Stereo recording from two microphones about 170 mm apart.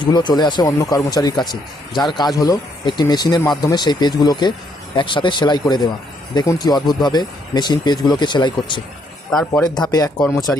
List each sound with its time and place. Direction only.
0.0 s speech: 25° left (ahead or behind)